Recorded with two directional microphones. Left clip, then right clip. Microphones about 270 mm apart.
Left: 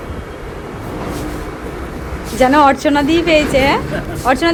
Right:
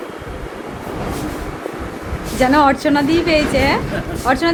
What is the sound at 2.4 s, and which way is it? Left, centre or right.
A woman's voice, centre.